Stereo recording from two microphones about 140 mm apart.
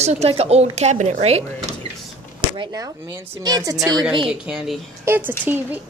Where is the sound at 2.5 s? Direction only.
30° right (ahead or behind).